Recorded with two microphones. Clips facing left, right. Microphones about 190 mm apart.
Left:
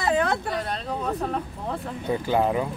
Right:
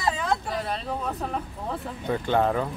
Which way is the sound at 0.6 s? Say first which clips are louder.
Left 1 dB; centre (ahead or behind).